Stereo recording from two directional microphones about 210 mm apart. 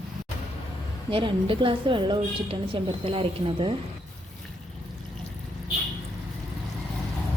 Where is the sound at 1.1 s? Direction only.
25° right (ahead or behind).